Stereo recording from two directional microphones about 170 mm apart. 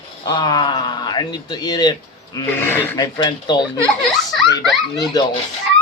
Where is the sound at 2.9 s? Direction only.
25° left (ahead or behind).